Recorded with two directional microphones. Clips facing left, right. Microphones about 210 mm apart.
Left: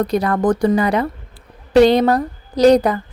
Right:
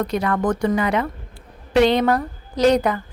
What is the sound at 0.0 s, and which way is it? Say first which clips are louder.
Speech: left 4 dB; 35° left (ahead or behind).